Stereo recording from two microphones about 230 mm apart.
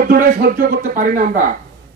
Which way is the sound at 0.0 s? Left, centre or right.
Right.